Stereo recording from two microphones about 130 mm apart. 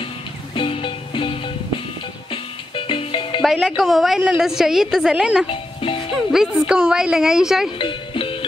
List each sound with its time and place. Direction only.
0.6 s music: 40° left (ahead or behind)
3.6 s a woman's voice: centre (ahead or behind)
5.5 s music: 45° left (ahead or behind)
6.3 s a woman's voice: 5° right (ahead or behind)
7.8 s music: 40° left (ahead or behind)